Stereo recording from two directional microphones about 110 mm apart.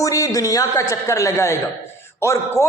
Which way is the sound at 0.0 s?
30° left (ahead or behind).